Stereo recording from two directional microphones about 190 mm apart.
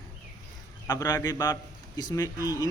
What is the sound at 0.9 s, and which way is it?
Speech, 20° left (ahead or behind).